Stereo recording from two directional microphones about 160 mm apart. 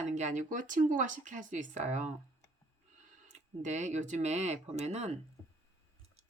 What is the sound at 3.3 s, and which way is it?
Speech, 45° right (ahead or behind).